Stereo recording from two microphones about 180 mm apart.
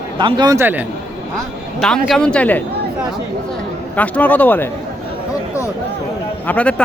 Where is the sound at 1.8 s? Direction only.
5° left (ahead or behind).